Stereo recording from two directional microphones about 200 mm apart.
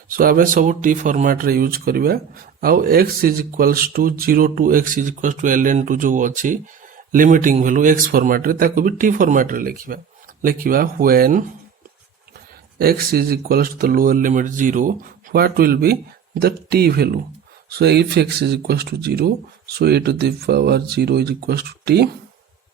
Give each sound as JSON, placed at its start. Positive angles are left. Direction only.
{"t": 0.1, "sound": "speech", "side_deg": -45}
{"t": 12.8, "sound": "speech", "side_deg": -50}